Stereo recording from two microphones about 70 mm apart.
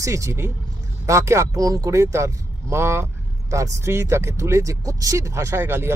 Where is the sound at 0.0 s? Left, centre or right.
Right.